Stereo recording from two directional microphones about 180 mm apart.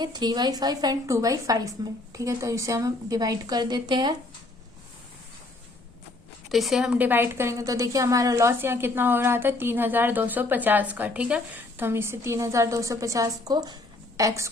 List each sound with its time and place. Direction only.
0.0 s a woman's voice: 25° right (ahead or behind)
6.5 s a woman's voice: centre (ahead or behind); by 14.5 s 20° right (ahead or behind)